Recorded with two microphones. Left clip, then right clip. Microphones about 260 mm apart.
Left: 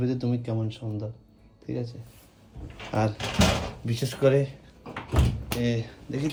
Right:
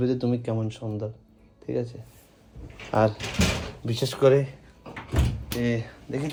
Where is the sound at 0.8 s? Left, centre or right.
Right.